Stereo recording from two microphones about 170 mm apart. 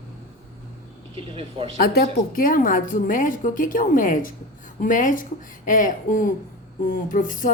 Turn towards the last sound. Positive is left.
turn(degrees=50)  # may be behind; listen again after turning